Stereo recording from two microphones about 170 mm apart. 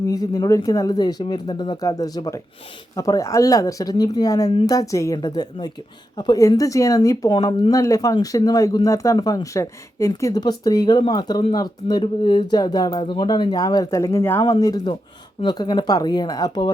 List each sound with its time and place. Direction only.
0.1 s speech: 20° left (ahead or behind)